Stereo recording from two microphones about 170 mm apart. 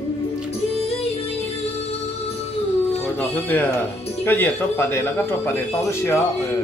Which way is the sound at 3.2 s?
10° left (ahead or behind).